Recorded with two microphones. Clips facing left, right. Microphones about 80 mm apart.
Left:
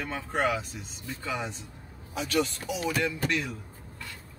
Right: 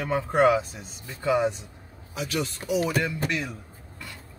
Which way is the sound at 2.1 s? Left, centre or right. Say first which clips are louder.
Left 2 dB; centre.